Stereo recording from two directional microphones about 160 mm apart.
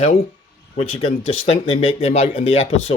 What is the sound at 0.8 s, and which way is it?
Speech, 40° left (ahead or behind).